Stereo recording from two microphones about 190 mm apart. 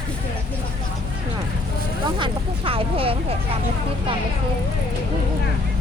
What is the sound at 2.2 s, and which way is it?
Speech, 30° right (ahead or behind).